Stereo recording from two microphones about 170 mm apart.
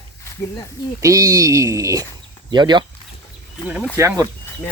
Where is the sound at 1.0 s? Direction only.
20° right (ahead or behind).